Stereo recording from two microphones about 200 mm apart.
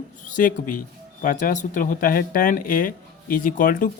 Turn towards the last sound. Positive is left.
turn(degrees=45)  # may be behind; listen again after turning